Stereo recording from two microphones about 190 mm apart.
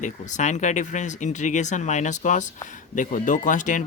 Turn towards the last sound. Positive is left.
turn(degrees=45)  # may be behind; listen again after turning